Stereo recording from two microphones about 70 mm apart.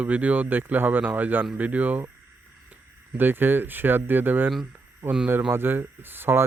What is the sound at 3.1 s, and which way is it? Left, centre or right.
Speech, right.